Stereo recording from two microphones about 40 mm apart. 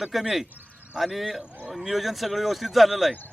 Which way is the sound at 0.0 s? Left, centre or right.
Centre.